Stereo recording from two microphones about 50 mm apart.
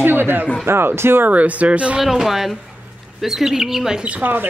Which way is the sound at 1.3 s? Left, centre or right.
Right.